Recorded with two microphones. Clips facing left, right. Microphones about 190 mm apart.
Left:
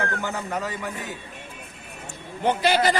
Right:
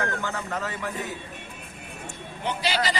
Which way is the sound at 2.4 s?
50° left (ahead or behind).